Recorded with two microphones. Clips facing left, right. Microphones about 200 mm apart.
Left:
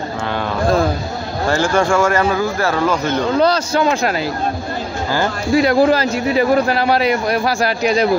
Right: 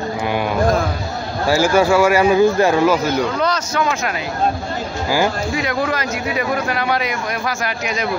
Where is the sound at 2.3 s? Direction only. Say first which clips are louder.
Right 5 dB; 20° right (ahead or behind).